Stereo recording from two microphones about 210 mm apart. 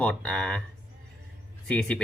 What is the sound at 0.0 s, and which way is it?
Speech, 5° left (ahead or behind).